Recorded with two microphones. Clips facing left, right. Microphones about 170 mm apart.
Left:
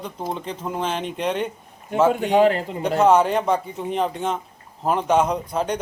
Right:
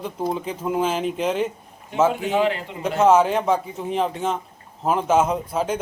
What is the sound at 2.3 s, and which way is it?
Speech, 40° left (ahead or behind).